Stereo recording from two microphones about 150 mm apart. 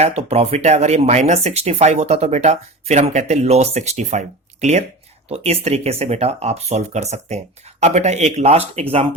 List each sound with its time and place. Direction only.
0.0 s speech: 40° right (ahead or behind)